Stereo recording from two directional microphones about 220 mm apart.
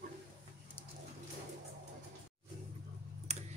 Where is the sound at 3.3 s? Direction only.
30° right (ahead or behind).